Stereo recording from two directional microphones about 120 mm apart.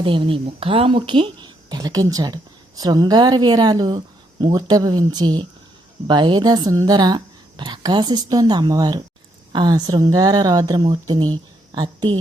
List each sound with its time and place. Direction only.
0.0 s a woman's voice: 45° right (ahead or behind)